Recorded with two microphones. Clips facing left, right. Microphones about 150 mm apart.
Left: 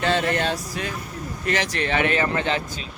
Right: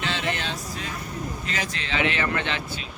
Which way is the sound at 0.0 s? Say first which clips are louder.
Left 7 dB; 55° left (ahead or behind).